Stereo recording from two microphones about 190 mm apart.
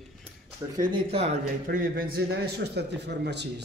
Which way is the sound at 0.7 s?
30° right (ahead or behind).